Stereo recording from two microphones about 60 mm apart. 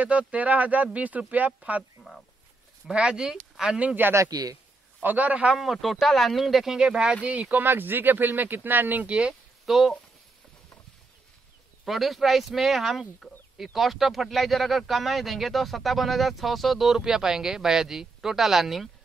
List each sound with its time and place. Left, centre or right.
0.0 s speech: right
2.9 s speech: centre
3.8 s speech: right
4.3 s speech: right
5.0 s speech: right
5.5 s speech: centre; by 7.6 s right
7.6 s speech: right
9.7 s speech: centre
11.8 s speech: centre
13.2 s chicken: centre
13.7 s speech: centre